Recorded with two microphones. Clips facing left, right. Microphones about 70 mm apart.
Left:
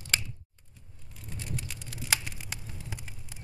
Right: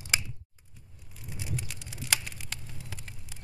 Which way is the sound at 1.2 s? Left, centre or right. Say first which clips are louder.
Right 1 dB; centre.